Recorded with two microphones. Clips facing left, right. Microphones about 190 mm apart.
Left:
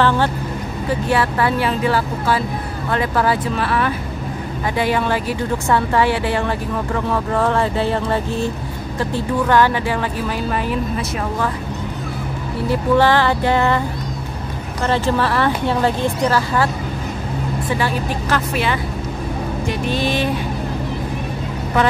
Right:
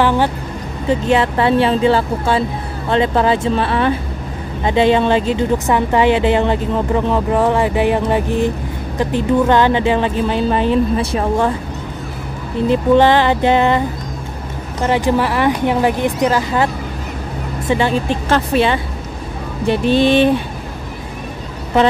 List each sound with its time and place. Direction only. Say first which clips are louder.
0.0 s a woman's voice: right 2 dB; 15° right (ahead or behind)
12.6 s a woman's voice: right 4 dB; 20° right (ahead or behind)